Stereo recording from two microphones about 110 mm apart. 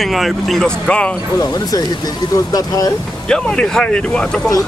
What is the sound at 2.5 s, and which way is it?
Speech, 35° left (ahead or behind).